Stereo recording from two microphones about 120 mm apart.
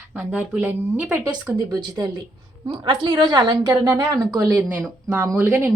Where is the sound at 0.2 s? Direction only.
10° right (ahead or behind).